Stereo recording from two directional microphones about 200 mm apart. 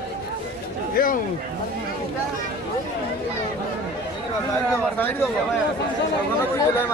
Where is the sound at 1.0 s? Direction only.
45° left (ahead or behind).